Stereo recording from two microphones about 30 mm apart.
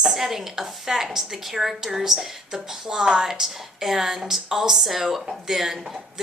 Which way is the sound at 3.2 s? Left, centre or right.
Centre.